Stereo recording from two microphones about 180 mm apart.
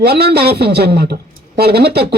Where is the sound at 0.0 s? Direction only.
65° right (ahead or behind).